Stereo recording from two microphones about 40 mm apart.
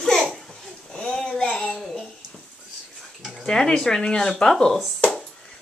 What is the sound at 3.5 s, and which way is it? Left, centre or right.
Speech, centre.